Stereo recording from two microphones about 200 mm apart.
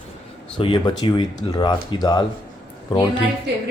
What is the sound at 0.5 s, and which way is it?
Speech, 25° left (ahead or behind).